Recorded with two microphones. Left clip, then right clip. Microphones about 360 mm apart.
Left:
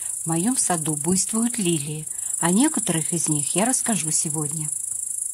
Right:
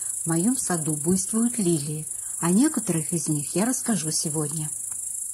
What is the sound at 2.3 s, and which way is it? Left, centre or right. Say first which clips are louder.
Speech: left 2 dB; left.